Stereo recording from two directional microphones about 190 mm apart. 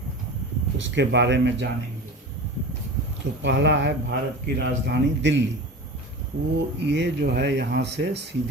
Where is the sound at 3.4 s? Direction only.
70° right (ahead or behind).